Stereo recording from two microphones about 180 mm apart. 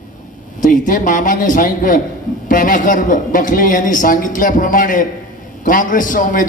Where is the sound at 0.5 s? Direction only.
45° left (ahead or behind).